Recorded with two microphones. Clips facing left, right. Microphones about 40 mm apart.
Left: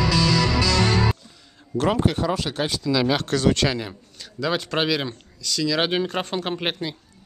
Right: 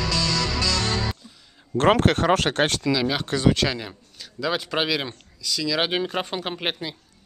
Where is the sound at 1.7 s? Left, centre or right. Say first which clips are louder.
Right 4 dB; right.